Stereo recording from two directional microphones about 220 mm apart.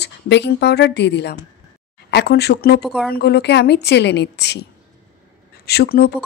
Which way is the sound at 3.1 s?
50° left (ahead or behind).